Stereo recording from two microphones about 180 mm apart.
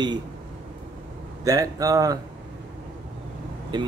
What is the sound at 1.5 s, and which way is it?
Speech, 20° right (ahead or behind).